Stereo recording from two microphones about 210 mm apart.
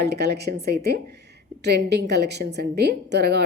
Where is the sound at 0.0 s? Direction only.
50° right (ahead or behind).